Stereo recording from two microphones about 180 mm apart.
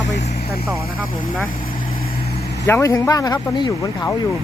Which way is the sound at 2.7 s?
15° left (ahead or behind).